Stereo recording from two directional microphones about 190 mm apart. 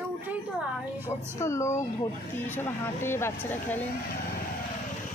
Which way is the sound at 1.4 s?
15° left (ahead or behind).